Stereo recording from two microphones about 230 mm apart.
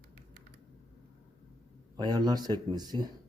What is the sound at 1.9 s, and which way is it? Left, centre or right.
Speech, centre.